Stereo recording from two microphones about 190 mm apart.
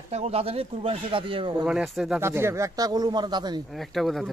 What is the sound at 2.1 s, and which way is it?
Speech, 15° right (ahead or behind).